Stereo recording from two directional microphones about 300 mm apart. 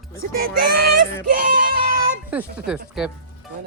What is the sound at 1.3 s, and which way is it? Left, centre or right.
Music, right.